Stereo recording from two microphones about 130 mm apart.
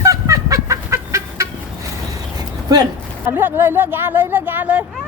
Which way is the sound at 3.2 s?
15° right (ahead or behind).